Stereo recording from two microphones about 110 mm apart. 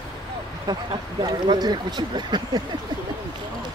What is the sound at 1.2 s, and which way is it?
Speech, 40° right (ahead or behind).